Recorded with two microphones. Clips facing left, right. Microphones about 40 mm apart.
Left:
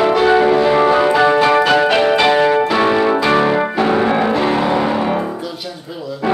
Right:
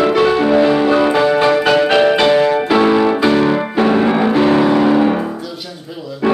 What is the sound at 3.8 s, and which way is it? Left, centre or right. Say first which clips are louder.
Music: right 3 dB; centre.